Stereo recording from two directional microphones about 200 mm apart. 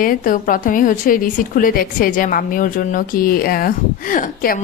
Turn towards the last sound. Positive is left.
turn(degrees=40)  # may be behind; listen again after turning